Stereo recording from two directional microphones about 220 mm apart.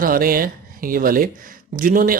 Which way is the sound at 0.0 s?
40° right (ahead or behind).